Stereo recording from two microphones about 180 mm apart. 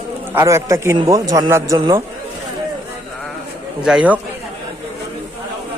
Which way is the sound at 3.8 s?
5° right (ahead or behind).